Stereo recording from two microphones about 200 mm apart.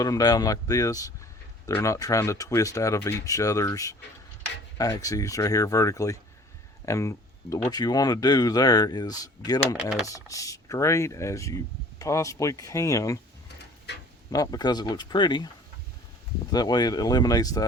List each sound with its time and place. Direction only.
0.0 s speech: 20° left (ahead or behind)
14.3 s speech: 15° left (ahead or behind)
16.5 s speech: 20° left (ahead or behind)